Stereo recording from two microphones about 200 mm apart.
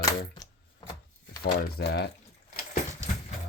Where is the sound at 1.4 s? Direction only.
55° left (ahead or behind).